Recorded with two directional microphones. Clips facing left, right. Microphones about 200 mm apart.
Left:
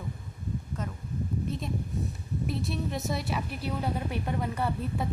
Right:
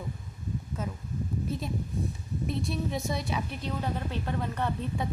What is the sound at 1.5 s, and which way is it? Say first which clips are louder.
A woman's voice: even; centre (ahead or behind).